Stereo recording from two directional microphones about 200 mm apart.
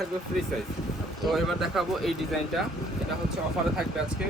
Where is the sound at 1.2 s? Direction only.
Centre (ahead or behind).